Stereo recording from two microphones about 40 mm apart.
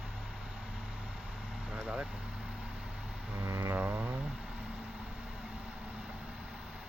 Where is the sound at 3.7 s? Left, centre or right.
Right.